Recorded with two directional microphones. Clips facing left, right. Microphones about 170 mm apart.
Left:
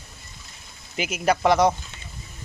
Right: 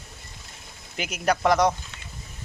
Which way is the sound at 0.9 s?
5° left (ahead or behind).